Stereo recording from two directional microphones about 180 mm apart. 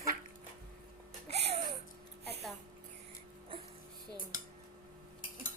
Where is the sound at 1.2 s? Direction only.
35° right (ahead or behind).